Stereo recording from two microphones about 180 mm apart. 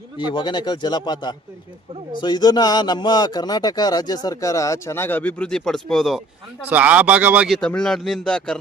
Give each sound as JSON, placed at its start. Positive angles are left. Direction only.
{"t": 0.3, "sound": "speech", "side_deg": 25}